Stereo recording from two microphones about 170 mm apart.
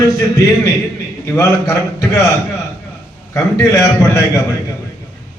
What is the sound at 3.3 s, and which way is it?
Speech, 20° left (ahead or behind).